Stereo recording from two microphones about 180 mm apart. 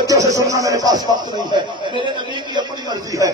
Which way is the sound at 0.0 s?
20° right (ahead or behind).